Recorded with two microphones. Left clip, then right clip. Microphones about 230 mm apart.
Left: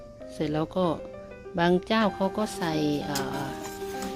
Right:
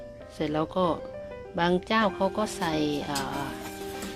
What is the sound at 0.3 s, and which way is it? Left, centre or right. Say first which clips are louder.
Speech: right 1 dB; left.